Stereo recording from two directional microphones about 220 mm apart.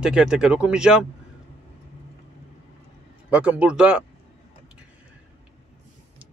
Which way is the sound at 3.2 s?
5° right (ahead or behind).